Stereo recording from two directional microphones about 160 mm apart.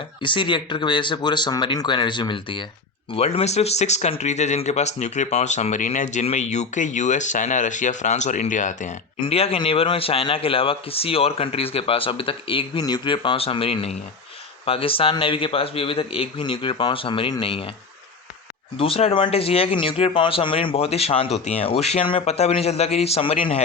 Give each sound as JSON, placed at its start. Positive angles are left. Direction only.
{"t": 0.2, "sound": "speech", "side_deg": 30}
{"t": 9.2, "sound": "speech", "side_deg": 40}
{"t": 18.8, "sound": "speech", "side_deg": 35}